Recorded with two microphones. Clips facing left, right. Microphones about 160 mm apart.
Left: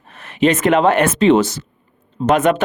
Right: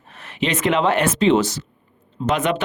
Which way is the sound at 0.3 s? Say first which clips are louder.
Left 6 dB; 50° left (ahead or behind).